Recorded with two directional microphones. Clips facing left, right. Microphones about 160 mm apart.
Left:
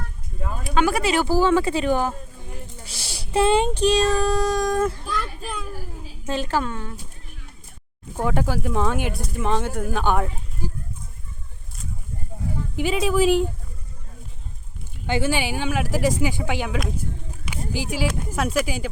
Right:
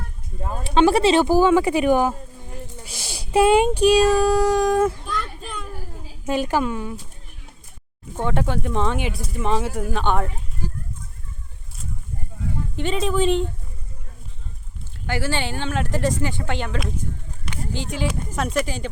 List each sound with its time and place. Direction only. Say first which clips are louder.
0.4 s speech: right 4 dB; 30° right (ahead or behind); by 4.9 s 10° right (ahead or behind)
5.0 s children playing: left 1 dB; 5° left (ahead or behind)
6.2 s speech: right 3 dB; 15° right (ahead or behind)
8.1 s speech: even; 5° left (ahead or behind)
12.7 s speech: left 1 dB; 5° left (ahead or behind)
15.0 s speech: left 2 dB; 20° left (ahead or behind)